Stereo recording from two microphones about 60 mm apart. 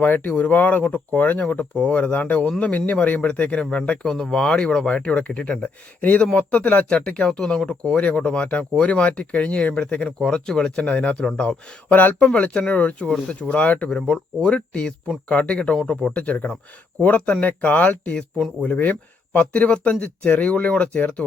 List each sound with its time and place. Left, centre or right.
0.0 s speech: left
12.3 s speech: centre